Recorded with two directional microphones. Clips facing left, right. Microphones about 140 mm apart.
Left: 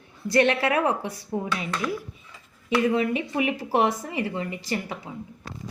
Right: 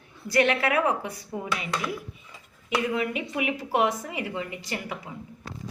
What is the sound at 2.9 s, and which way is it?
Speech, 30° left (ahead or behind).